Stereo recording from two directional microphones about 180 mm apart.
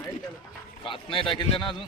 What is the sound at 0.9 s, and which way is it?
Speech, 30° left (ahead or behind).